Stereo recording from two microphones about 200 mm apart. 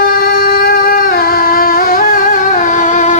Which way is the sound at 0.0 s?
45° left (ahead or behind).